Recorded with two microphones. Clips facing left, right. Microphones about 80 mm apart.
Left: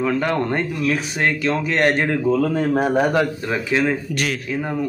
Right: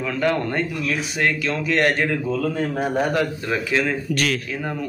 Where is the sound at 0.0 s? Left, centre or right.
Left.